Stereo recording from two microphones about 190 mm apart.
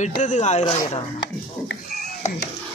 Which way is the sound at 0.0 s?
40° left (ahead or behind).